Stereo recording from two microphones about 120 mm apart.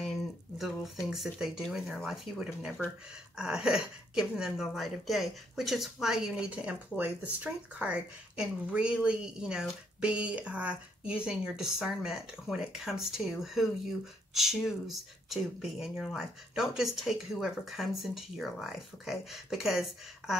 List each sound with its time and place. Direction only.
0.6 s a woman's voice: centre (ahead or behind)